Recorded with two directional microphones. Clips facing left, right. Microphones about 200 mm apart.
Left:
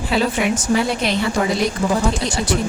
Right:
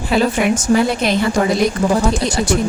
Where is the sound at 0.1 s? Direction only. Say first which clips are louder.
Right 4 dB; 50° right (ahead or behind).